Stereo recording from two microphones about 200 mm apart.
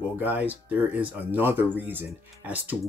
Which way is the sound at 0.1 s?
10° right (ahead or behind).